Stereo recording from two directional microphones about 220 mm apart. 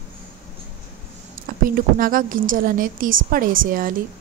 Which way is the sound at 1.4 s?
40° right (ahead or behind).